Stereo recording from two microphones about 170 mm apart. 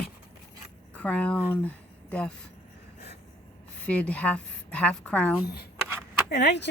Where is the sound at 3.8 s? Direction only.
5° left (ahead or behind).